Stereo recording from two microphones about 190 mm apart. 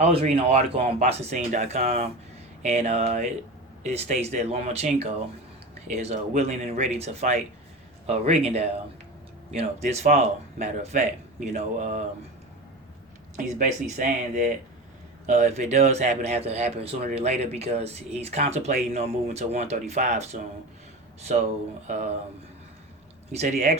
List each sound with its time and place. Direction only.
0.0 s speech: 30° right (ahead or behind)
13.3 s speech: 40° right (ahead or behind)
21.8 s speech: 35° right (ahead or behind)
23.3 s speech: 35° right (ahead or behind)